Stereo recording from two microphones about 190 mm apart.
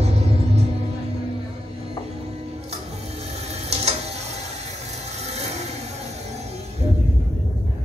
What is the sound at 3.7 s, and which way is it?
Printer, 35° right (ahead or behind).